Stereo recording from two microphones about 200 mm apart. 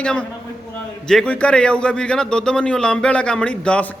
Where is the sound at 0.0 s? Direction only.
5° left (ahead or behind).